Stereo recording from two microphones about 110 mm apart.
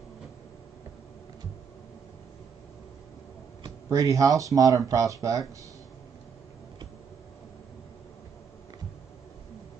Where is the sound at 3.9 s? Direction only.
30° right (ahead or behind).